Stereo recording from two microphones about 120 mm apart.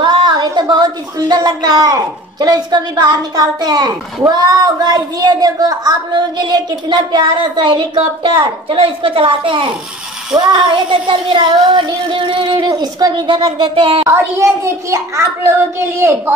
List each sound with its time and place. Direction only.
0.0 s a woman's voice: 40° right (ahead or behind)
10.3 s child singing: 40° right (ahead or behind)
14.0 s a child's voice: 20° right (ahead or behind)